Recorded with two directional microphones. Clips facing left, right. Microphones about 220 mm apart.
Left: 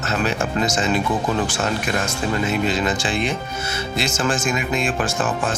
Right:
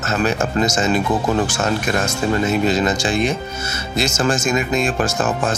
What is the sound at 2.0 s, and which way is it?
Speech, 40° right (ahead or behind).